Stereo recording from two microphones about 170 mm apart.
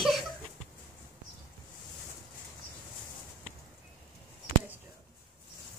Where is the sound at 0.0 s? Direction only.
Centre (ahead or behind).